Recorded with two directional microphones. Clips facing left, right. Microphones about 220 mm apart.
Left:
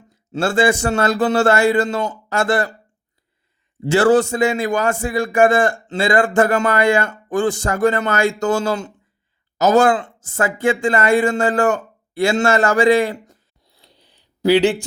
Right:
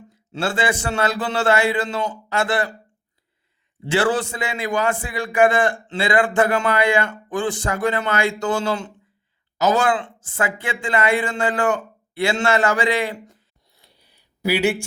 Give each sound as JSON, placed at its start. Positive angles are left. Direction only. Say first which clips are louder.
{"t": 0.3, "sound": "a man's voice", "louder": "left 6 dB", "side_deg": 45}
{"t": 3.8, "sound": "a man's voice", "louder": "left 7 dB", "side_deg": 45}
{"t": 14.4, "sound": "speech", "louder": "left 6 dB", "side_deg": -10}